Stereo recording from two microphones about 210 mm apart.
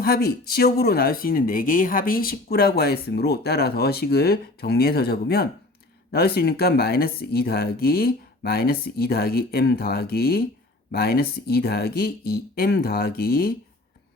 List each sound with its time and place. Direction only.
0.0 s speech: 45° left (ahead or behind)